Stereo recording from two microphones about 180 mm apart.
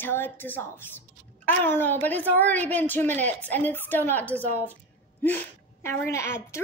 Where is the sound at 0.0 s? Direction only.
10° left (ahead or behind).